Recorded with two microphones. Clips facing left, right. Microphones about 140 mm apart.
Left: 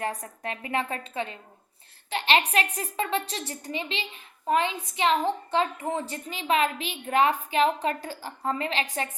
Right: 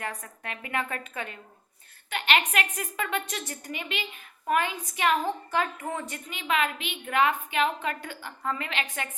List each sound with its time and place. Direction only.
0.0 s a woman's voice: 35° left (ahead or behind)